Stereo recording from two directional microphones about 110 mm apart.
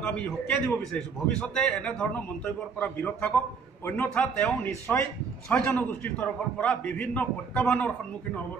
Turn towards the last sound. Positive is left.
turn(degrees=15)  # may be behind; listen again after turning